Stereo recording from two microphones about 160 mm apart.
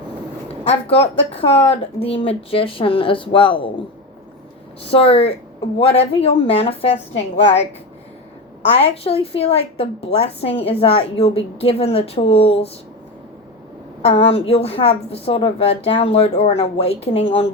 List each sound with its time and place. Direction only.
0.6 s a woman's voice: 40° left (ahead or behind)
4.9 s a woman's voice: 35° left (ahead or behind)
8.6 s a woman's voice: 40° left (ahead or behind)
14.0 s a woman's voice: 40° left (ahead or behind)